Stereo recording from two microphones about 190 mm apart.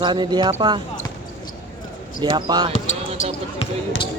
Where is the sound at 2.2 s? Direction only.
20° right (ahead or behind).